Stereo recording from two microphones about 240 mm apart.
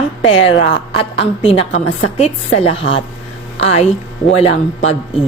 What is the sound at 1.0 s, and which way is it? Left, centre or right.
A woman's voice, left.